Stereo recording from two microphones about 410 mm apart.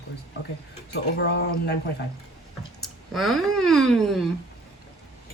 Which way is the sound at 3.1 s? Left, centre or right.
Centre.